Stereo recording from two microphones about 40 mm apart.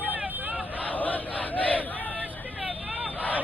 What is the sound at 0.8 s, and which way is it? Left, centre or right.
Crowd, left.